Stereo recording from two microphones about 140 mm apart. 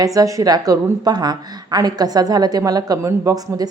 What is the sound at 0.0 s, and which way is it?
A woman's voice, 25° right (ahead or behind).